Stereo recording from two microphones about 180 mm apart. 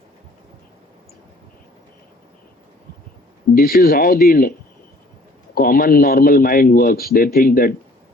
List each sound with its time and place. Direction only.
3.5 s a man's voice: 55° left (ahead or behind)
5.5 s a man's voice: 55° left (ahead or behind)